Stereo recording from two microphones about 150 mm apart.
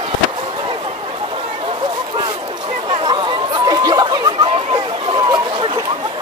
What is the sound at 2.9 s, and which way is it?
Chatter, 30° right (ahead or behind).